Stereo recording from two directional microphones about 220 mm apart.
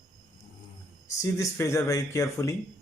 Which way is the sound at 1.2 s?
15° left (ahead or behind).